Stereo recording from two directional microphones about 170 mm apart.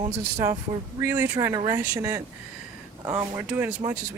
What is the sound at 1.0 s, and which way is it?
Speech, 15° right (ahead or behind).